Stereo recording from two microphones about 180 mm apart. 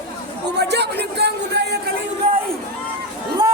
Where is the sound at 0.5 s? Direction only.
70° right (ahead or behind).